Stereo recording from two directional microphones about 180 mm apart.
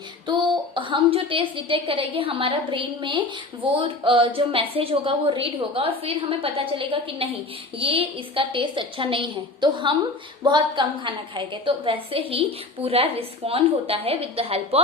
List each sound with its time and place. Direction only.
0.8 s a woman's voice: 30° right (ahead or behind)